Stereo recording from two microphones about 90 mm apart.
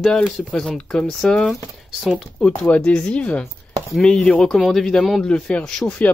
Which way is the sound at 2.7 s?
10° left (ahead or behind).